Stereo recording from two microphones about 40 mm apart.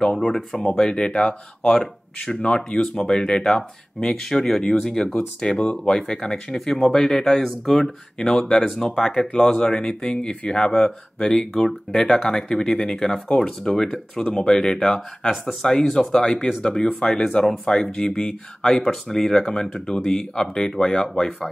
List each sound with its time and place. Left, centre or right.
0.2 s speech: centre
0.7 s speech: centre
1.7 s speech: centre
2.4 s speech: left
3.0 s speech: centre
4.2 s speech: centre
8.4 s speech: centre
9.0 s speech: left
11.6 s speech: centre